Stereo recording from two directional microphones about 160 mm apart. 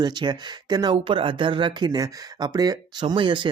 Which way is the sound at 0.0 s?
25° right (ahead or behind).